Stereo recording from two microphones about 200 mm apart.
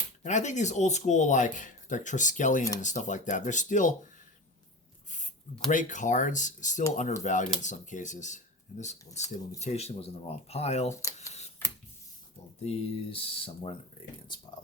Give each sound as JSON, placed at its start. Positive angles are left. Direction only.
{"t": 0.2, "sound": "speech", "side_deg": 35}
{"t": 5.1, "sound": "a sound", "side_deg": 40}
{"t": 5.7, "sound": "speech", "side_deg": 40}
{"t": 10.8, "sound": "speech", "side_deg": 15}
{"t": 11.3, "sound": "camera", "side_deg": 35}
{"t": 12.6, "sound": "speech", "side_deg": 30}